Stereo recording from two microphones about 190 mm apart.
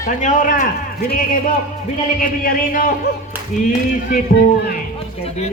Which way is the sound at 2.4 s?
50° left (ahead or behind).